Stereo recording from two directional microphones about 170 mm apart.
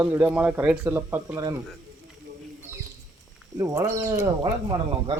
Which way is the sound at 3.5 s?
20° right (ahead or behind).